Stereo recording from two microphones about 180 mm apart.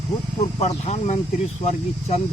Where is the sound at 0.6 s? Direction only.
35° left (ahead or behind).